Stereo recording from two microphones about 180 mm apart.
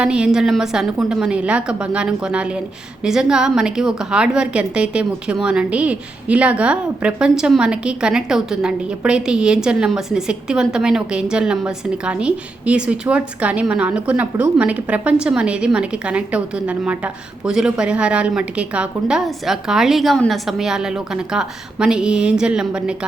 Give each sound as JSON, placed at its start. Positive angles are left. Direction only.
{"t": 0.0, "sound": "a woman's voice", "side_deg": -5}